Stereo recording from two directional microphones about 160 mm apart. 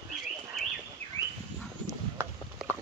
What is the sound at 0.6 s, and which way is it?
Bird, centre (ahead or behind).